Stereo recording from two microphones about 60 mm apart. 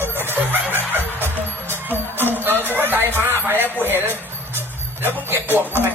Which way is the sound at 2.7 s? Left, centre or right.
Right.